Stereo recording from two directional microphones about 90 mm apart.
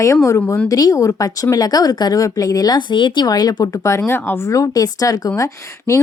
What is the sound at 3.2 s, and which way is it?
Speech, 45° left (ahead or behind).